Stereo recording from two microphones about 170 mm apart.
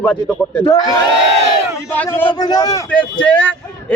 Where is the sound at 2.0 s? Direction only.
10° left (ahead or behind).